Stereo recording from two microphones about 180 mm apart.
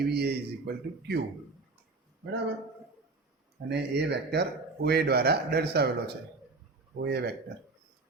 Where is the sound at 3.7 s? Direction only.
70° right (ahead or behind).